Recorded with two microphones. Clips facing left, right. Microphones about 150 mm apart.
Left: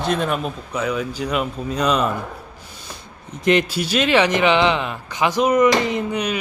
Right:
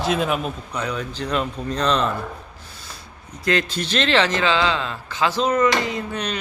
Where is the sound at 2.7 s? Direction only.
20° left (ahead or behind).